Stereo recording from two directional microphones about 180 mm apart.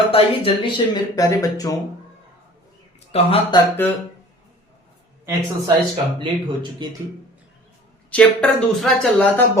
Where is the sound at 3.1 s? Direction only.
30° left (ahead or behind).